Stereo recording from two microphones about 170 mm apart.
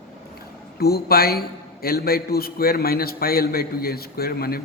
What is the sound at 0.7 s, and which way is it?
A man's voice, 65° left (ahead or behind).